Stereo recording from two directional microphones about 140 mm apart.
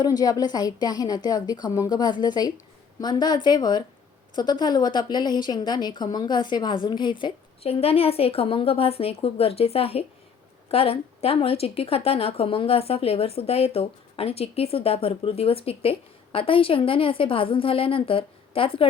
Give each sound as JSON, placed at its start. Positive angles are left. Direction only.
{"t": 0.0, "sound": "a woman's voice", "side_deg": 25}